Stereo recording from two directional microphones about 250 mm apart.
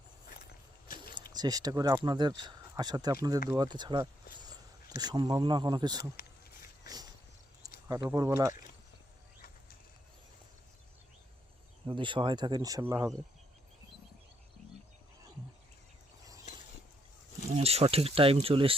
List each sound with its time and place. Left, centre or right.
1.3 s speech: centre
6.8 s a sound: centre
8.1 s speech: centre
11.9 s speech: centre
17.5 s speech: right